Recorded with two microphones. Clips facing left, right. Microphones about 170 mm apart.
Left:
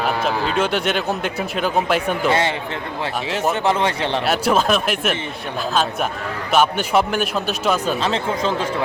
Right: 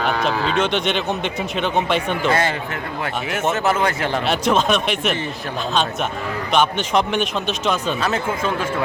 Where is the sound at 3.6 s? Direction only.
25° left (ahead or behind).